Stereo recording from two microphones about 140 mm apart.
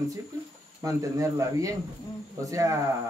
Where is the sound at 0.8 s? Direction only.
20° right (ahead or behind).